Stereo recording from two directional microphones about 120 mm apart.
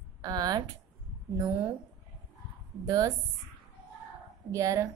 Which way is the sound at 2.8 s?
30° right (ahead or behind).